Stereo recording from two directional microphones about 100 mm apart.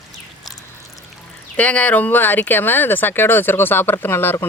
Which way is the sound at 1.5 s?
15° left (ahead or behind).